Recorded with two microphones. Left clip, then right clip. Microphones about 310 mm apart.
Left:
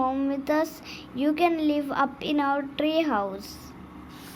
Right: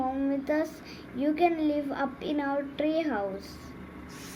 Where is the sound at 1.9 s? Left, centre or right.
Left.